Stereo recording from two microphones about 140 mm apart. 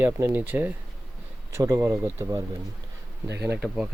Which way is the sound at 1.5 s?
25° right (ahead or behind).